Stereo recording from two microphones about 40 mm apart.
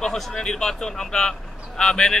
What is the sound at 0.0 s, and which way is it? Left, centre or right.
A man's voice, centre.